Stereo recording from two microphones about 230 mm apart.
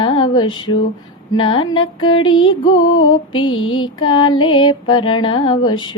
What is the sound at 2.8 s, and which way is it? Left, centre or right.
Music, left.